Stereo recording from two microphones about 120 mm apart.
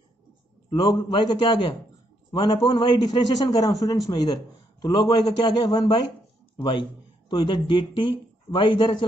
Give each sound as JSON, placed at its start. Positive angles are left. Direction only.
{"t": 0.7, "sound": "a man's voice", "side_deg": 35}